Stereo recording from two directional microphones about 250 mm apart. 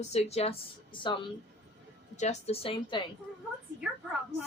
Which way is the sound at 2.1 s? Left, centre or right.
Left.